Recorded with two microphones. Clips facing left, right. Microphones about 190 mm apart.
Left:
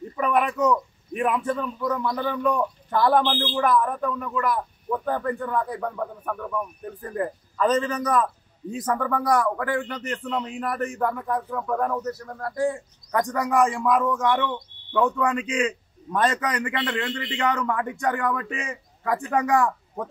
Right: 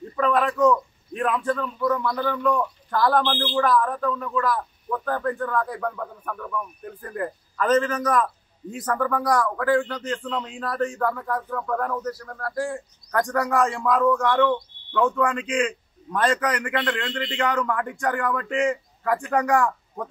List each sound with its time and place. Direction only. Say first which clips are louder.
0.2 s a man's voice: right 2 dB; 15° left (ahead or behind)